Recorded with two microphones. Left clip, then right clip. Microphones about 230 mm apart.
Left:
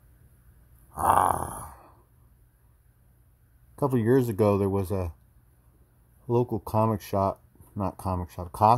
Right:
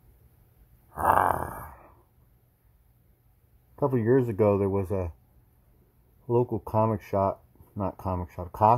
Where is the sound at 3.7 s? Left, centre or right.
Centre.